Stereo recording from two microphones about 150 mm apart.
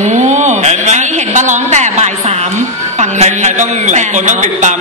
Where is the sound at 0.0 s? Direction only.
50° right (ahead or behind).